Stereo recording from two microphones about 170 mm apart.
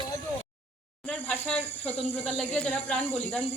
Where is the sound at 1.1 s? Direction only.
5° left (ahead or behind).